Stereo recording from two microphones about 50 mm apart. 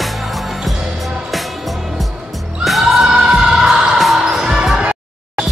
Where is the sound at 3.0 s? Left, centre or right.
Centre.